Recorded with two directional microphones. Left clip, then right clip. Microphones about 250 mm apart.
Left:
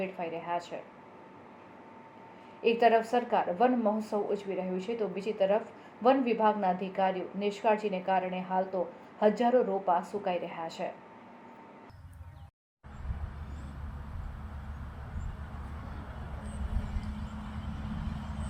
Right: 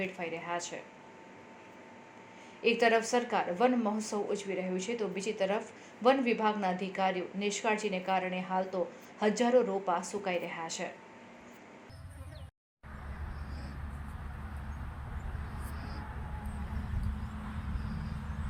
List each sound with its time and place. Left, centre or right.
0.0 s speech: right
2.6 s speech: centre